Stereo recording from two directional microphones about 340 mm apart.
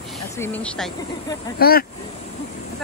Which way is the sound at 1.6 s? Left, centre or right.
Left.